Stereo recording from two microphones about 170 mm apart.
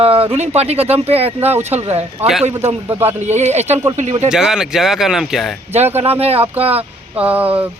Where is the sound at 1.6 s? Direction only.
40° right (ahead or behind).